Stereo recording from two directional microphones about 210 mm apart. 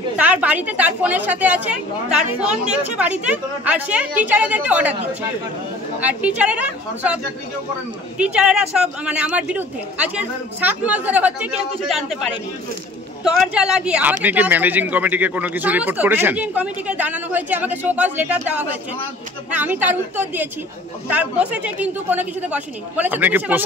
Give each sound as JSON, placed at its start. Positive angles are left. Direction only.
{"t": 0.2, "sound": "speech", "side_deg": -5}
{"t": 5.9, "sound": "speech", "side_deg": -5}
{"t": 8.2, "sound": "speech", "side_deg": -5}